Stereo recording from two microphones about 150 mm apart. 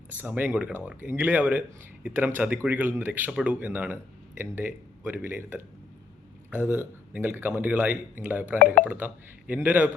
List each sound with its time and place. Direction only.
0.1 s speech: 10° right (ahead or behind)